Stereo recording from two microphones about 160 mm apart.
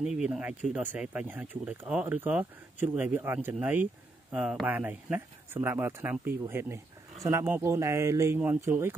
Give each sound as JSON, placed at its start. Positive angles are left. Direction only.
{"t": 0.0, "sound": "speech", "side_deg": -5}